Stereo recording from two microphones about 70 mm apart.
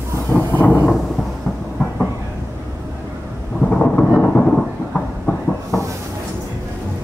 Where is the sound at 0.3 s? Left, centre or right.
Left.